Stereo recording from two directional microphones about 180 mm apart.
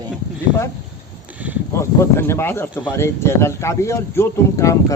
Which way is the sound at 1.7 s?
15° left (ahead or behind).